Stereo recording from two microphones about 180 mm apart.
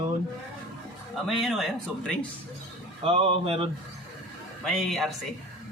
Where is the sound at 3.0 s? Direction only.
35° right (ahead or behind).